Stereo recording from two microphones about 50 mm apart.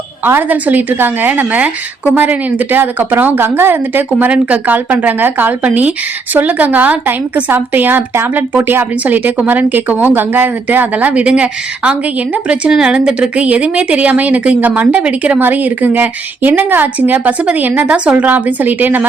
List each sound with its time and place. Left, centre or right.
0.3 s speech: right
4.3 s a woman's voice: right
17.9 s a woman's voice: right
18.3 s speech: right